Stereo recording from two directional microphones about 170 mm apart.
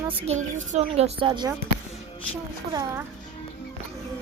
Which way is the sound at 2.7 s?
20° right (ahead or behind).